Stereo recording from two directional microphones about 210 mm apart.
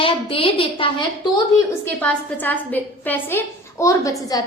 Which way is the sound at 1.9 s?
10° left (ahead or behind).